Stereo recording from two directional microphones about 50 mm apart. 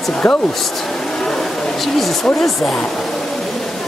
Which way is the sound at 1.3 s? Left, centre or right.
Centre.